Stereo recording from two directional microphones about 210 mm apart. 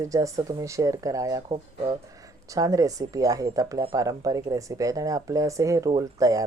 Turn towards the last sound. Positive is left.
turn(degrees=-15)  # may be behind; listen again after turning